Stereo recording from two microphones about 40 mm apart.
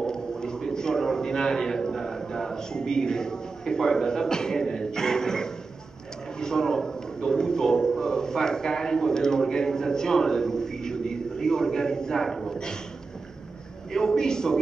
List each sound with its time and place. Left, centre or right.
0.0 s a sound: centre
6.4 s a man's voice: centre
12.3 s a man's voice: centre
13.9 s a man's voice: centre